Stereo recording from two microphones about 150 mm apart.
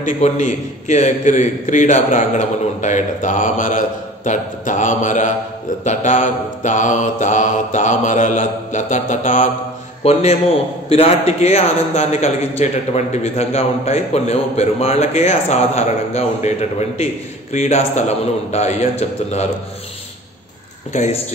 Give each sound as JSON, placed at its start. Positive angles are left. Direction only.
{"t": 0.0, "sound": "a man's voice", "side_deg": 55}
{"t": 10.9, "sound": "a man's voice", "side_deg": 45}
{"t": 20.9, "sound": "a man's voice", "side_deg": 55}